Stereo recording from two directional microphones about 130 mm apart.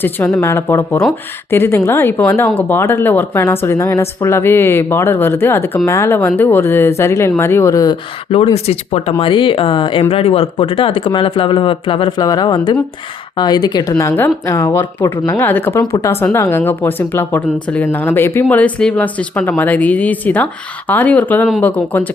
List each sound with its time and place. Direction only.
0.4 s speech: 20° left (ahead or behind)
8.5 s speech: 55° left (ahead or behind); by 15.9 s 15° left (ahead or behind)
15.9 s speech: 25° left (ahead or behind)